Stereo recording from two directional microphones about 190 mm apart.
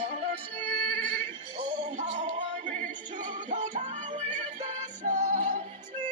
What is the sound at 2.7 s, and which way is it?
Music, 40° right (ahead or behind).